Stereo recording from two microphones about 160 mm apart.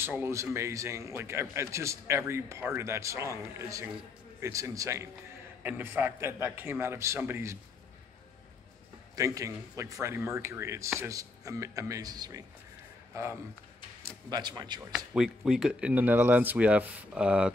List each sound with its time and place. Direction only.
0.0 s a man's voice: 15° right (ahead or behind)
9.1 s speech: 20° right (ahead or behind)
15.1 s a man's voice: 5° right (ahead or behind)